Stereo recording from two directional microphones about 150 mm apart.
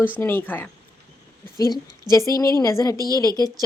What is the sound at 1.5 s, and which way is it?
A woman's voice, 25° left (ahead or behind).